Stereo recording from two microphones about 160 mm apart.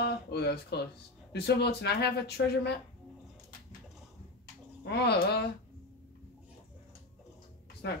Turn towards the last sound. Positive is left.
turn(degrees=90)